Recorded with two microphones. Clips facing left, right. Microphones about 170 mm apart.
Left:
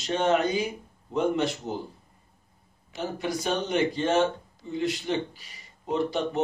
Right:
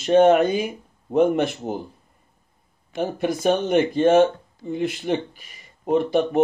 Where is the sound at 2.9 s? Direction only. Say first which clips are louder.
Right 6 dB; 55° right (ahead or behind).